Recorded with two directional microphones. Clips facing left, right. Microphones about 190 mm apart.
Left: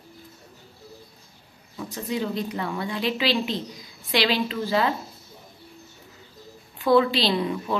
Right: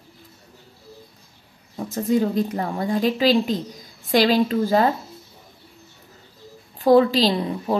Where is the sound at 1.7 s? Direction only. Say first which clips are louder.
Right 8 dB; 45° right (ahead or behind).